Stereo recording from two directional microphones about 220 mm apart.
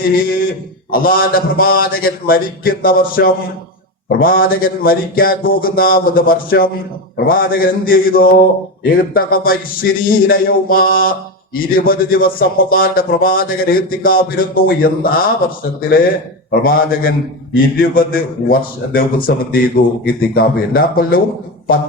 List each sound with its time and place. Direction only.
0.0 s speech: 40° left (ahead or behind)